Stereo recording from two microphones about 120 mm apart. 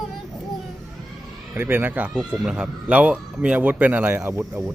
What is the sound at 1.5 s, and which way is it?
Speech, 20° right (ahead or behind).